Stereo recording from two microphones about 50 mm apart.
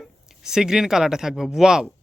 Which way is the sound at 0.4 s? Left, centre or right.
Centre.